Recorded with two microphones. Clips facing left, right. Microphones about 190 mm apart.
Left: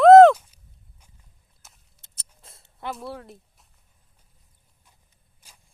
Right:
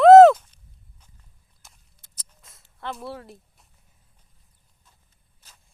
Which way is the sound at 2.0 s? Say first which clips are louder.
Left 2 dB; 30° left (ahead or behind).